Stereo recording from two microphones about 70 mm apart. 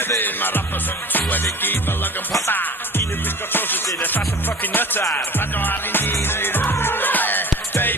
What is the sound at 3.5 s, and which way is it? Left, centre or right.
Music, left.